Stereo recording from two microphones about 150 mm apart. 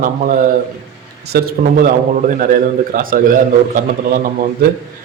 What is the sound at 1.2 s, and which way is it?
A man's voice, 90° right.